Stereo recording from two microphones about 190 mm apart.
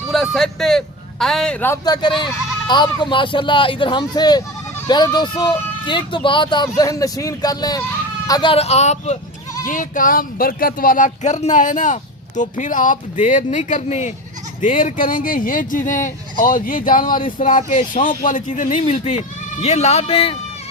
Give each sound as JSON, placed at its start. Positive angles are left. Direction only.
{"t": 0.1, "sound": "a man's voice", "side_deg": 0}
{"t": 1.8, "sound": "speech", "side_deg": 20}